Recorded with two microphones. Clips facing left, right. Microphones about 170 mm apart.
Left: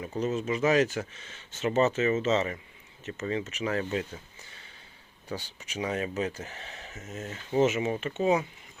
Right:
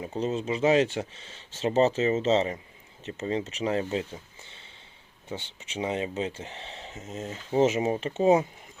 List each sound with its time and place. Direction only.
0.0 s speech: 30° right (ahead or behind)
5.3 s speech: 25° right (ahead or behind)